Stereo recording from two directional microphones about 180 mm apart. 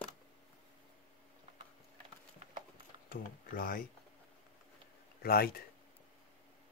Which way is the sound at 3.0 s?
50° left (ahead or behind).